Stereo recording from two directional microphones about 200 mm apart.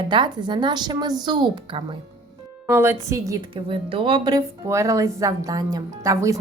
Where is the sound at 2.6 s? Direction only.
10° right (ahead or behind).